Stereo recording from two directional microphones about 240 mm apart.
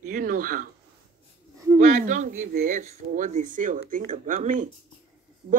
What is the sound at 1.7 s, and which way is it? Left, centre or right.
Speech, right.